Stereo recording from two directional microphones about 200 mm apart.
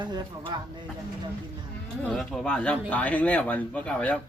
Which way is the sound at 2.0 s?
Centre (ahead or behind).